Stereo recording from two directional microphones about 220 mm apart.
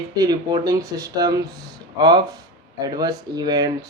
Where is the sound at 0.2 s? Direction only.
15° right (ahead or behind).